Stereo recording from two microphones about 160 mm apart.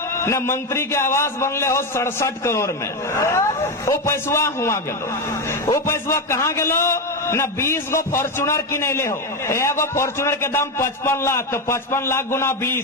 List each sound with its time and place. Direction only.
0.2 s a man's voice: 15° left (ahead or behind)